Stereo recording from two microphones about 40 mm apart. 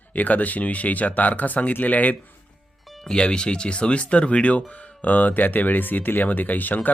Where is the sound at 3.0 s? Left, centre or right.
Left.